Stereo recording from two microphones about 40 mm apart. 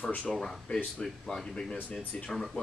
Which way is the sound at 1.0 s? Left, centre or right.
Left.